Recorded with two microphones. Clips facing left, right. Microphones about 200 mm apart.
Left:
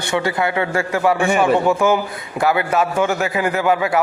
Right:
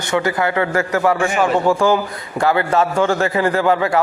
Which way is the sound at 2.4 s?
15° left (ahead or behind).